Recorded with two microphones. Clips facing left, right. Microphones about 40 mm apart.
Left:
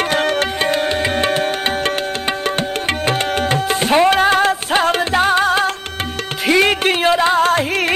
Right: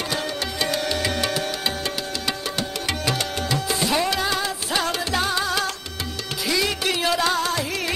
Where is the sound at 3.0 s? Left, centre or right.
Left.